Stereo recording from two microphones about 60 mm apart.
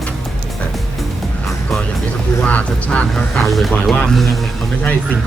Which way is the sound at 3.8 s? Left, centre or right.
Centre.